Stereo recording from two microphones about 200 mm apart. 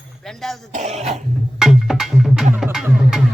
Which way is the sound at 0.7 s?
35° right (ahead or behind).